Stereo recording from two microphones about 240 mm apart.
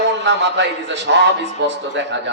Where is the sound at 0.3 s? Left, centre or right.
Right.